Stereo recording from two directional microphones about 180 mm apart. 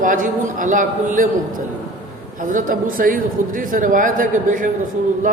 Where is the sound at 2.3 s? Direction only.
45° right (ahead or behind).